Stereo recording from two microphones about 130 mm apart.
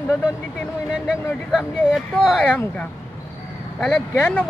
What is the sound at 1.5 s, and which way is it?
Speech, 5° right (ahead or behind).